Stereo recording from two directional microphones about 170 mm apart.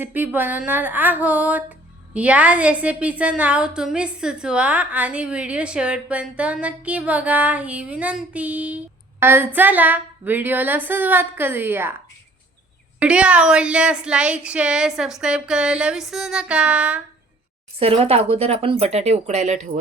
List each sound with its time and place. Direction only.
0.0 s a woman's voice: 10° right (ahead or behind)
13.0 s a woman's voice: 5° right (ahead or behind)
17.7 s speech: 35° right (ahead or behind)